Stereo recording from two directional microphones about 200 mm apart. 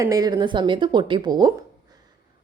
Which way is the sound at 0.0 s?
20° right (ahead or behind).